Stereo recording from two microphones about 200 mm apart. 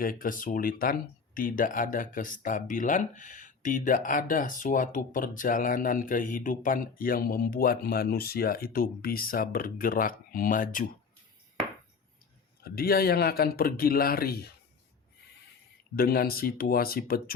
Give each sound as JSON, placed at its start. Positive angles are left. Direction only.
{"t": 0.0, "sound": "speech", "side_deg": 45}
{"t": 12.6, "sound": "speech", "side_deg": 50}
{"t": 16.0, "sound": "speech", "side_deg": 50}